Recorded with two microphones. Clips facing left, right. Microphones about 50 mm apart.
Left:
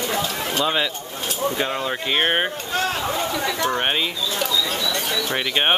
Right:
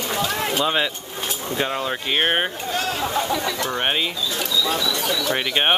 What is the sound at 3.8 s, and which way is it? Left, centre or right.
Speech, centre.